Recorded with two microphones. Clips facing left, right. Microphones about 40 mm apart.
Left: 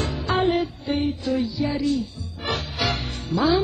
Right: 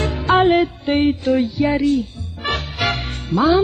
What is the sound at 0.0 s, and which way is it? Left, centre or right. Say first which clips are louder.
Music: right 7 dB; right.